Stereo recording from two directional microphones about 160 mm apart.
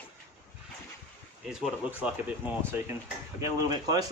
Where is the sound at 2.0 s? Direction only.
10° right (ahead or behind).